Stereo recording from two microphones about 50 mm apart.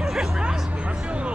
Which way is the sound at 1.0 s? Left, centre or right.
Right.